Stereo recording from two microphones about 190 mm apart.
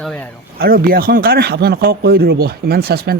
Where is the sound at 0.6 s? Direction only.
50° right (ahead or behind).